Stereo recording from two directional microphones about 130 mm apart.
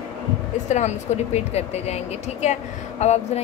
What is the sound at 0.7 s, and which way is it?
A woman's voice, 65° left (ahead or behind).